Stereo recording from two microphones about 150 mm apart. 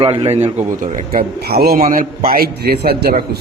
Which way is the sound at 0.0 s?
35° right (ahead or behind).